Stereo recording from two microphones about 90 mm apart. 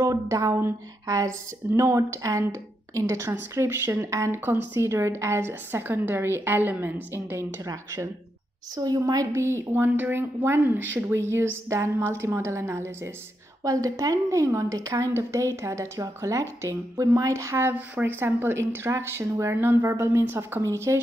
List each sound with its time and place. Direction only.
0.0 s a woman's voice: 35° right (ahead or behind)